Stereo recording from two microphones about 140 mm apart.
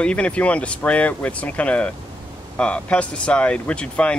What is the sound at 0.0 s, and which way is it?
Speech, 10° left (ahead or behind).